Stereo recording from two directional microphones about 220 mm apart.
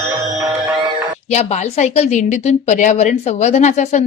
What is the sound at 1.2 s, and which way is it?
A woman's voice, 30° left (ahead or behind).